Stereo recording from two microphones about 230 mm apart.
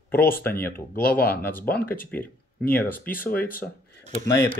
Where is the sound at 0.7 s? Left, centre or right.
Left.